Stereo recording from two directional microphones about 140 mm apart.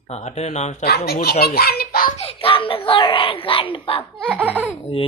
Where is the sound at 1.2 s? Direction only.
90° left.